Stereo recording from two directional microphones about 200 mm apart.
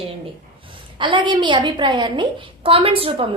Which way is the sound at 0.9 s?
25° right (ahead or behind).